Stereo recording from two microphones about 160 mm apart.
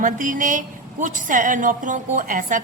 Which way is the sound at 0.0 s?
55° right (ahead or behind).